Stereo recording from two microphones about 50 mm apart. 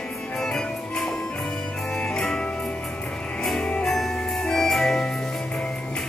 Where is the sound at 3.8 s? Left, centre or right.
Centre.